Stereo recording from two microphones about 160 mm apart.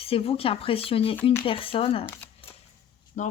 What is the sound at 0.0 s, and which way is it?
Speech, 35° left (ahead or behind).